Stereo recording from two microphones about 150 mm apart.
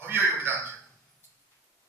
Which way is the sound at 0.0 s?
15° right (ahead or behind).